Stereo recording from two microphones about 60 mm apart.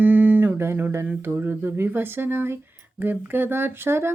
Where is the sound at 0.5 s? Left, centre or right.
Right.